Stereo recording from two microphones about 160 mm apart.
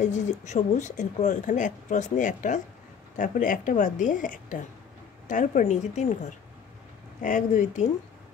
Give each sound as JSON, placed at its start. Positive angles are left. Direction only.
{"t": 0.0, "sound": "speech", "side_deg": 50}
{"t": 7.2, "sound": "speech", "side_deg": 50}